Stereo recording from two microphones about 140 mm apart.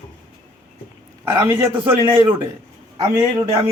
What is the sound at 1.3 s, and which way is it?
Speech, 30° right (ahead or behind).